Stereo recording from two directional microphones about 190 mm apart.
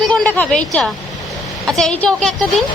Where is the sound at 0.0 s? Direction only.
5° left (ahead or behind).